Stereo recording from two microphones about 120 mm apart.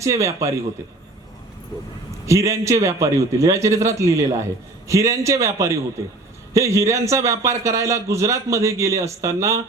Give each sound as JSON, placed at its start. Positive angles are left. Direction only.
{"t": 0.0, "sound": "a man's voice", "side_deg": -25}
{"t": 2.2, "sound": "a man's voice", "side_deg": -25}